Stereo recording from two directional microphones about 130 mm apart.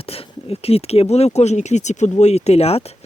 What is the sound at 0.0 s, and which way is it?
Speech, 45° left (ahead or behind).